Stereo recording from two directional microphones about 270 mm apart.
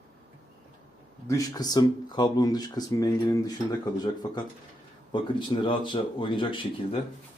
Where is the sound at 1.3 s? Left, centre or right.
Centre.